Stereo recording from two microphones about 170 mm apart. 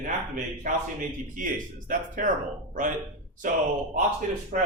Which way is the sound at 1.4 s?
50° right (ahead or behind).